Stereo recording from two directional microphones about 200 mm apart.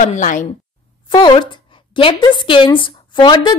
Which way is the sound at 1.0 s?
25° left (ahead or behind).